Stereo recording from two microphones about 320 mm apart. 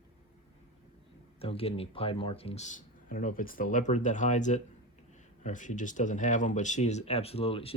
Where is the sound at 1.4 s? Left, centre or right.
Centre.